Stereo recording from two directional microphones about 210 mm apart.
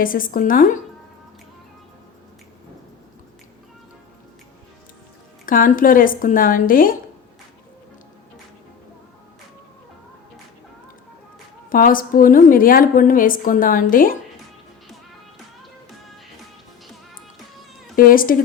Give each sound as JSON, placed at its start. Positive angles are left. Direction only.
{"t": 0.0, "sound": "a woman's voice", "side_deg": 40}
{"t": 5.5, "sound": "a woman's voice", "side_deg": 40}
{"t": 11.7, "sound": "a woman's voice", "side_deg": 40}
{"t": 17.9, "sound": "a woman's voice", "side_deg": 45}